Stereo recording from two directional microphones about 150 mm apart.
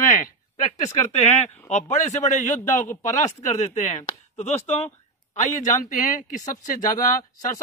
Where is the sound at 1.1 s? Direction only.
45° left (ahead or behind).